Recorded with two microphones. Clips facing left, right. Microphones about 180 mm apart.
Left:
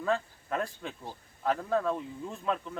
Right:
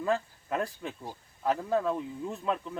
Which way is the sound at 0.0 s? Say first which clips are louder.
Right 1 dB; 5° right (ahead or behind).